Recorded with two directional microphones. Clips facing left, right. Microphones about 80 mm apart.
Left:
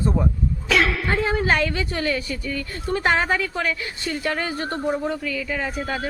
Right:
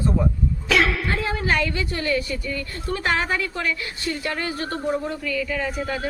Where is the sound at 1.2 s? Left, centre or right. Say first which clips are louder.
Left 4 dB; left.